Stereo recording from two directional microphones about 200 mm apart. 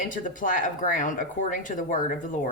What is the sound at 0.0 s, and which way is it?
Speech, 40° left (ahead or behind).